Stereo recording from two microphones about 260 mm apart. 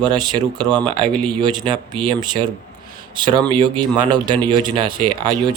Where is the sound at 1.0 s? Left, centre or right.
Centre.